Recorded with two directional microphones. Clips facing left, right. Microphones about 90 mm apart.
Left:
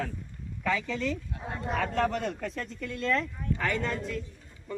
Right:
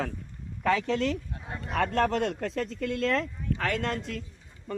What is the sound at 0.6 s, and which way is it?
Speech, 75° right (ahead or behind).